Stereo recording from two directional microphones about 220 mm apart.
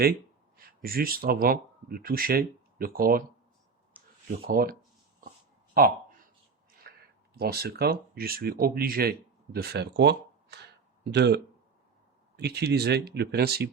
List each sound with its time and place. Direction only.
0.5 s speech: 40° right (ahead or behind)
4.4 s speech: 40° right (ahead or behind)
6.8 s a sound: 45° right (ahead or behind)
7.3 s speech: 45° right (ahead or behind)
12.4 s speech: 45° right (ahead or behind)